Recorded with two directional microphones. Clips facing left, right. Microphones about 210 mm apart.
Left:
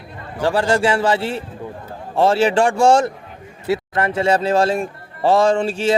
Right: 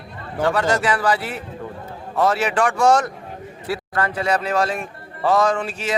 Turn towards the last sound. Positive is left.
turn(degrees=30)  # may be behind; listen again after turning